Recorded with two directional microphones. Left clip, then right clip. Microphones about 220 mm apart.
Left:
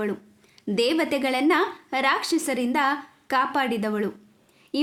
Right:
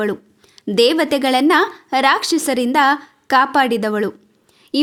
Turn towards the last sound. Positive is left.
turn(degrees=-35)  # may be behind; listen again after turning